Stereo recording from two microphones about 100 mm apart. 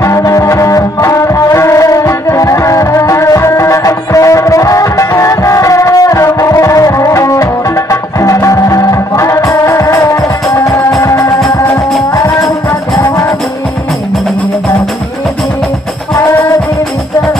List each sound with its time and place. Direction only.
0.0 s music: 35° left (ahead or behind)
16.2 s music: 30° left (ahead or behind)